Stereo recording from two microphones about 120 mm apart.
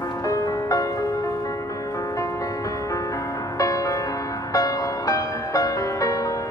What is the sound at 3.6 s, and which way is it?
Music, 30° left (ahead or behind).